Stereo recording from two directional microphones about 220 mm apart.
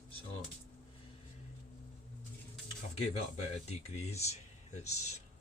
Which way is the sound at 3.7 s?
30° left (ahead or behind).